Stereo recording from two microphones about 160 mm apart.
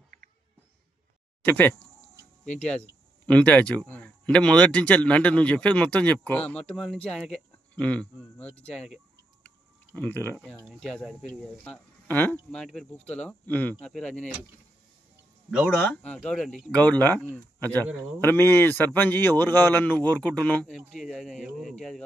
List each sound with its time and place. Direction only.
1.4 s speech: 10° left (ahead or behind)
2.4 s speech: 50° left (ahead or behind)
3.3 s speech: 10° left (ahead or behind)
9.9 s speech: 10° left (ahead or behind)
15.8 s speech: 10° left (ahead or behind)
20.6 s speech: 5° right (ahead or behind)